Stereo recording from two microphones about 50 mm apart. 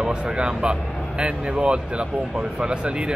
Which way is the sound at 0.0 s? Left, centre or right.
Centre.